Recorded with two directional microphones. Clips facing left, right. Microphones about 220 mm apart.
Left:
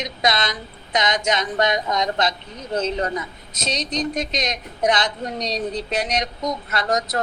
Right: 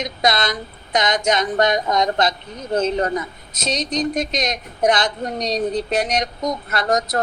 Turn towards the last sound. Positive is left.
turn(degrees=-50)  # may be behind; listen again after turning